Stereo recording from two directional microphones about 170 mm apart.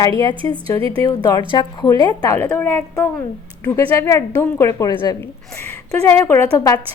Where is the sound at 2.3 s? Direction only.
10° left (ahead or behind).